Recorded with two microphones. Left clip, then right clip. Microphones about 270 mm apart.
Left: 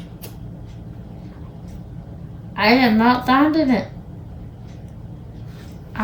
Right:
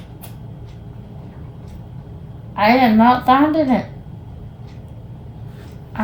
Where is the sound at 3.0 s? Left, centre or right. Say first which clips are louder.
Right 3 dB; centre.